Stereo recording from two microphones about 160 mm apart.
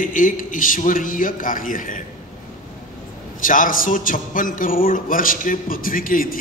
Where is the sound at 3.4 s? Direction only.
55° left (ahead or behind).